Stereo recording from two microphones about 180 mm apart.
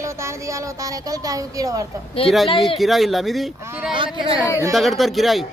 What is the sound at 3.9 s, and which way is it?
Speech, 25° right (ahead or behind).